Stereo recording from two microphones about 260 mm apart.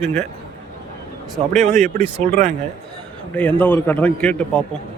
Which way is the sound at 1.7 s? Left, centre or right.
Right.